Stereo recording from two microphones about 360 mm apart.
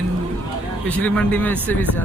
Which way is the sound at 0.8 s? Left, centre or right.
Centre.